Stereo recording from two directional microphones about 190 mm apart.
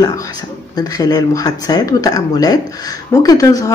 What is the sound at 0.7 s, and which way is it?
A woman's voice, 20° left (ahead or behind).